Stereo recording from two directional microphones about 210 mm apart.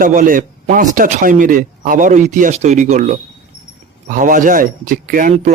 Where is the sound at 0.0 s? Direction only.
40° right (ahead or behind).